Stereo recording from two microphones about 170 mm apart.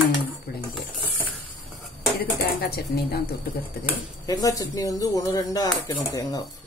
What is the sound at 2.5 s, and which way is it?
Speech, 65° left (ahead or behind).